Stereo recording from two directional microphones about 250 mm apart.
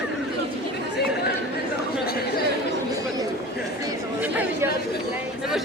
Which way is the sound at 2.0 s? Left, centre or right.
Left.